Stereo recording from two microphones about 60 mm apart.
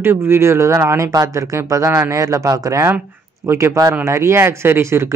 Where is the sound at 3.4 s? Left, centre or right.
Right.